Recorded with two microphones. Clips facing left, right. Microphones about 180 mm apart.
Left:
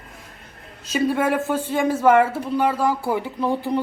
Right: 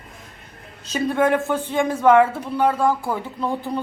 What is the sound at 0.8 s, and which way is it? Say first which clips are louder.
Speech: right 1 dB; 5° left (ahead or behind).